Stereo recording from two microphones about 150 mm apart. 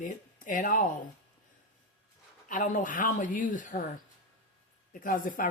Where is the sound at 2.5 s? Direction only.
60° left (ahead or behind).